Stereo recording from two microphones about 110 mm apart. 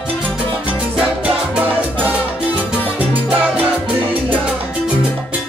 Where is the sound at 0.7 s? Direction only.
10° right (ahead or behind).